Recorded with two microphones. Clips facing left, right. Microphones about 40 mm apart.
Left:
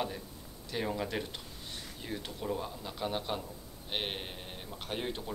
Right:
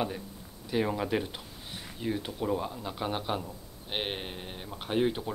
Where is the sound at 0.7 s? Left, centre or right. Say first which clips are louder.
Right 6 dB; centre.